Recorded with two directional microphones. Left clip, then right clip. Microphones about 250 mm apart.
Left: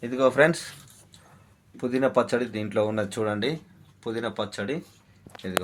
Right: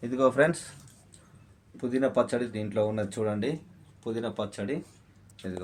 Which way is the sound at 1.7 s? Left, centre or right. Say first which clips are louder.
Left 3 dB; left.